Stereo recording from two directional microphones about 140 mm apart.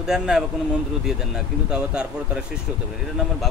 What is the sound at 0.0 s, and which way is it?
Speech, 5° right (ahead or behind).